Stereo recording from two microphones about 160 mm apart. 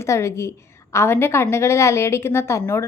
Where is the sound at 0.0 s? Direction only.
20° left (ahead or behind).